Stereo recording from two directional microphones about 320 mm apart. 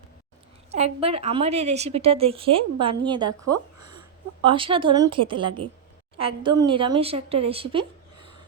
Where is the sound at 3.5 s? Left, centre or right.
Centre.